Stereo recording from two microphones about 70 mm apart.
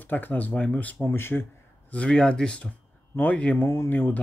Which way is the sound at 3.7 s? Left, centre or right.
Left.